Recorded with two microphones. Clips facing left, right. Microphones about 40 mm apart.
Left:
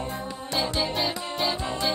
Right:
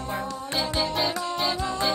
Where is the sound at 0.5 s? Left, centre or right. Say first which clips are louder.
Even; centre.